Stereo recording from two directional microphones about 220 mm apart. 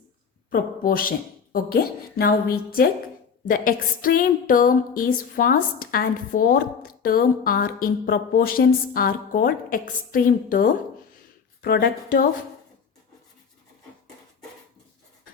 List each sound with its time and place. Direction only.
0.5 s a woman's voice: 40° left (ahead or behind)